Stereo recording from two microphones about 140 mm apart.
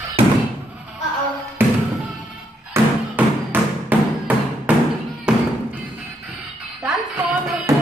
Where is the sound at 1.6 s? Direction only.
15° right (ahead or behind).